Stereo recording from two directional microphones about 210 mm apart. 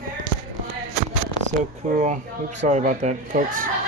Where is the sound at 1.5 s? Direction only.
35° right (ahead or behind).